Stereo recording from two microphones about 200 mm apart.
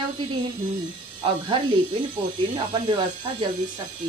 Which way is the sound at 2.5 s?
25° right (ahead or behind).